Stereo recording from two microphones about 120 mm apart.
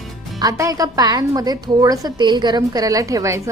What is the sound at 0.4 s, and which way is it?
A woman's voice, 30° right (ahead or behind).